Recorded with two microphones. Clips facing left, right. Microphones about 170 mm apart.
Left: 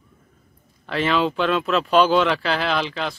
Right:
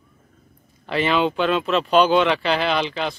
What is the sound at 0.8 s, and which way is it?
Speech, centre (ahead or behind).